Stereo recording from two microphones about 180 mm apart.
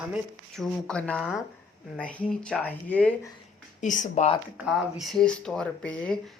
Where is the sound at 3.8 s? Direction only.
45° left (ahead or behind).